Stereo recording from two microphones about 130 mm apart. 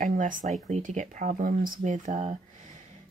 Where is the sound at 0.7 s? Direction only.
70° right (ahead or behind).